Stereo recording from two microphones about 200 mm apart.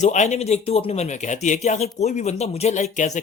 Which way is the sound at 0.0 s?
35° left (ahead or behind).